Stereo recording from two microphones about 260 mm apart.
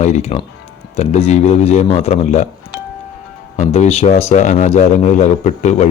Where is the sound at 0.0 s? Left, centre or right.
Left.